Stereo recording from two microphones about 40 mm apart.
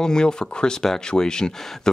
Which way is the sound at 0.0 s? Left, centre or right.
Centre.